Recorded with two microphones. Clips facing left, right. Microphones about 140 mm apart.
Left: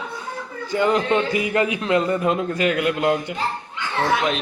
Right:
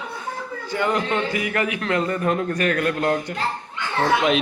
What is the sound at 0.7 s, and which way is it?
A man's voice, 20° left (ahead or behind).